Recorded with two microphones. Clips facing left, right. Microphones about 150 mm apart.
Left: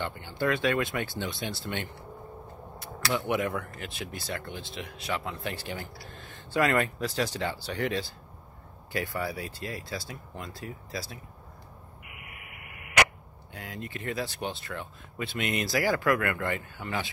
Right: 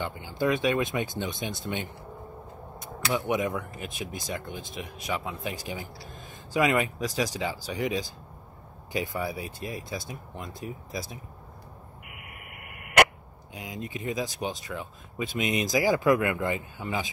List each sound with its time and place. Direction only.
0.0 s speech: 15° right (ahead or behind)
12.3 s buzzer: 50° right (ahead or behind)
13.5 s speech: 15° right (ahead or behind)